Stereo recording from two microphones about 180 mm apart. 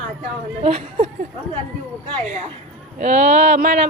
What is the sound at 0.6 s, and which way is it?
Speech, 35° right (ahead or behind).